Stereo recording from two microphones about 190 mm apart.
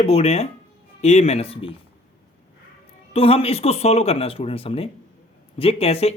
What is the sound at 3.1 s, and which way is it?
Speech, 30° left (ahead or behind).